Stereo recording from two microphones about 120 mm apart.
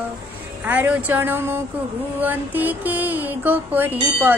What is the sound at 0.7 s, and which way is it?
A woman's voice, 15° right (ahead or behind).